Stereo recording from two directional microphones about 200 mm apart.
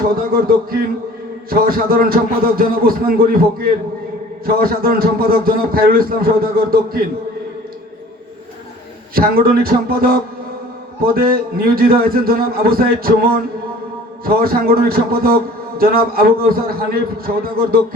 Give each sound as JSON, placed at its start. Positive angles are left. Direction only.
{"t": 0.2, "sound": "speech", "side_deg": -45}
{"t": 9.1, "sound": "speech", "side_deg": -50}